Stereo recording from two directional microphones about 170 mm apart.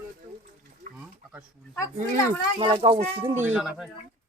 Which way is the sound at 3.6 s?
Centre (ahead or behind).